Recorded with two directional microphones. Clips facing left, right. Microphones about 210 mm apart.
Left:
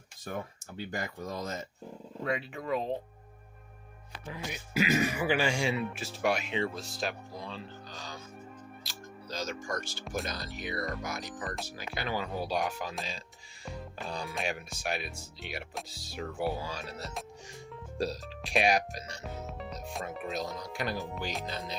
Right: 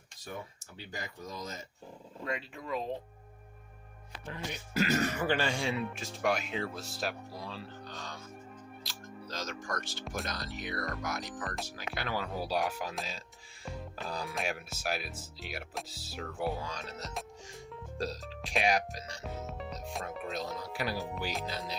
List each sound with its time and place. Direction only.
0.9 s speech: 55° left (ahead or behind)
4.3 s speech: 5° left (ahead or behind)
8.8 s music: centre (ahead or behind)
9.8 s speech: centre (ahead or behind)
19.2 s speech: centre (ahead or behind)